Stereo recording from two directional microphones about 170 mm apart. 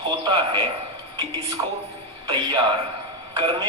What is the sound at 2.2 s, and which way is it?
A man's voice, 30° right (ahead or behind).